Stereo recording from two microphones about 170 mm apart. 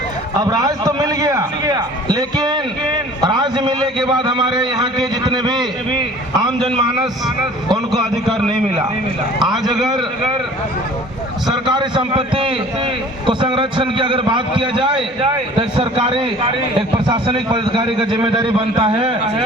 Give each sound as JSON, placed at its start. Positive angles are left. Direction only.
{"t": 0.3, "sound": "a man's voice", "side_deg": -20}
{"t": 11.5, "sound": "a man's voice", "side_deg": -25}